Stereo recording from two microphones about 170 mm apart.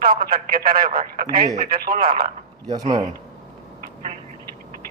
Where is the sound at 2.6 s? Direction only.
25° right (ahead or behind).